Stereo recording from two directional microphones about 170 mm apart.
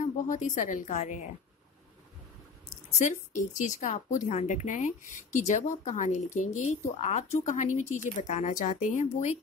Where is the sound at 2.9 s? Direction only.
45° left (ahead or behind).